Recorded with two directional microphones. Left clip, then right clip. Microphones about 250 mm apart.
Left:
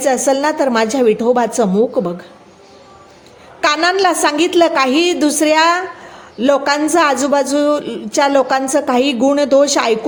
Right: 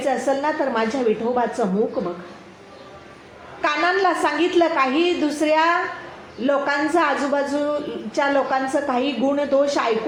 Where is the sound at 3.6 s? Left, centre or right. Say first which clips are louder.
Left 6 dB; left.